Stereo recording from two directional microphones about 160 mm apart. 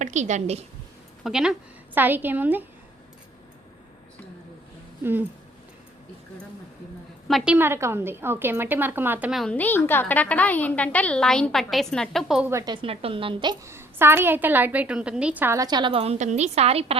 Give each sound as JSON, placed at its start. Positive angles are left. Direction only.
{"t": 0.0, "sound": "a woman's voice", "side_deg": -50}
{"t": 1.2, "sound": "a woman's voice", "side_deg": -5}
{"t": 7.3, "sound": "a woman's voice", "side_deg": -5}
{"t": 9.3, "sound": "a woman's voice", "side_deg": 5}
{"t": 12.5, "sound": "a woman's voice", "side_deg": -15}
{"t": 12.7, "sound": "a woman's voice", "side_deg": -35}
{"t": 13.7, "sound": "a woman's voice", "side_deg": -15}